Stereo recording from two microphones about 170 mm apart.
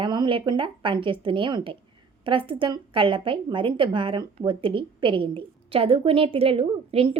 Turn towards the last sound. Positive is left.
turn(degrees=-35)  # may be behind; listen again after turning